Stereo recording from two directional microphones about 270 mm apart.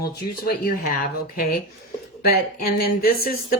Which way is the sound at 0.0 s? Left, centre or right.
Left.